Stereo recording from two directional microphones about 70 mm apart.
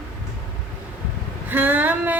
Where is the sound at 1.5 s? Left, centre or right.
Right.